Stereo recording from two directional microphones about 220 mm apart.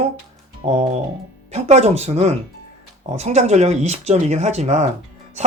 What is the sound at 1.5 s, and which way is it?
Speech, 30° right (ahead or behind).